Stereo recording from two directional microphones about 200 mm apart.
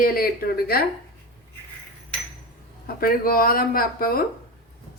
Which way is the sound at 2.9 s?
45° left (ahead or behind).